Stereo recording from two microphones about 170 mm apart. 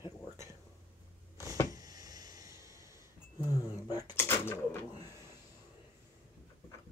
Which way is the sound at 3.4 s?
25° left (ahead or behind).